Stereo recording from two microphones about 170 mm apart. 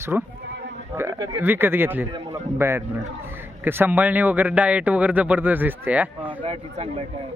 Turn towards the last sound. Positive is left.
turn(degrees=-35)  # may be behind; listen again after turning